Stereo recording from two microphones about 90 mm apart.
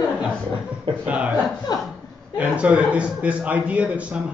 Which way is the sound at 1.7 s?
50° left (ahead or behind).